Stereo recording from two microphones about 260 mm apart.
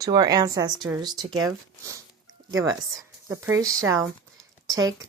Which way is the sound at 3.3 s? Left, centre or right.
Centre.